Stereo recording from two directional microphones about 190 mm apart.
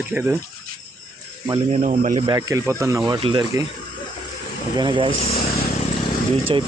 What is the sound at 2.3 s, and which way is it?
Speech, 20° right (ahead or behind).